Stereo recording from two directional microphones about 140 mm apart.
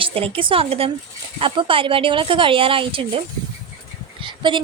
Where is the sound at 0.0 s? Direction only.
40° right (ahead or behind).